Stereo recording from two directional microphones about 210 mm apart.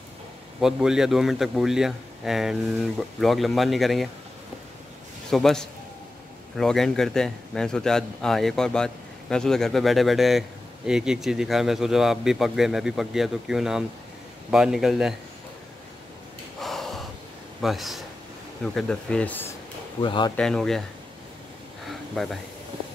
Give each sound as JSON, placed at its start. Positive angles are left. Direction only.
{"t": 0.6, "sound": "a man's voice", "side_deg": -5}
{"t": 5.3, "sound": "a man's voice", "side_deg": 0}
{"t": 16.6, "sound": "gasp", "side_deg": 0}
{"t": 17.6, "sound": "a man's voice", "side_deg": 0}
{"t": 20.0, "sound": "speech", "side_deg": 25}
{"t": 20.3, "sound": "a man's voice", "side_deg": 5}
{"t": 21.8, "sound": "a sound", "side_deg": 0}